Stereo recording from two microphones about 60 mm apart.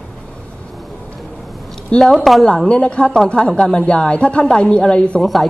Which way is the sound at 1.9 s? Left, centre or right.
Centre.